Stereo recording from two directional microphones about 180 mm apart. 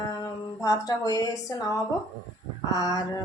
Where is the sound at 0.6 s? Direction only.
20° left (ahead or behind).